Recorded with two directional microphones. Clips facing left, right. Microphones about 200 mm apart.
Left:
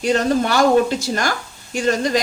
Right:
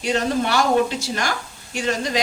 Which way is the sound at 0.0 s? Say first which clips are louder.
Left 4 dB; 45° left (ahead or behind).